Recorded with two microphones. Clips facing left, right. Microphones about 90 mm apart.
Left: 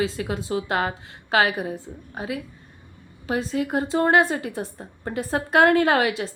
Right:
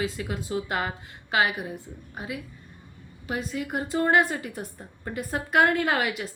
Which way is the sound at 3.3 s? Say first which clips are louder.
Left 6 dB; 30° left (ahead or behind).